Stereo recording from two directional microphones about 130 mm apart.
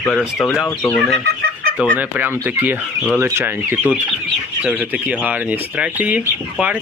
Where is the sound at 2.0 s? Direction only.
10° right (ahead or behind).